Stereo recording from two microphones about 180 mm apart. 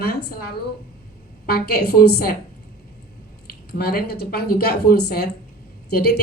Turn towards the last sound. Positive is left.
turn(degrees=65)  # may be behind; listen again after turning